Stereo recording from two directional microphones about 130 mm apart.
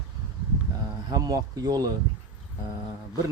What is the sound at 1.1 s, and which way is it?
Speech, 30° right (ahead or behind).